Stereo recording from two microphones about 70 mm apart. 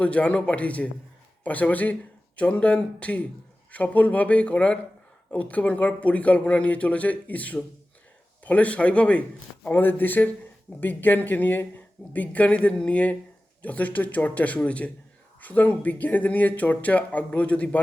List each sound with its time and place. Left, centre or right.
0.0 s a man's voice: centre